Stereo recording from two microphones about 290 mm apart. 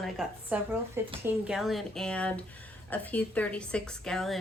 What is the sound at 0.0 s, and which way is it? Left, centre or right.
A woman's voice, centre.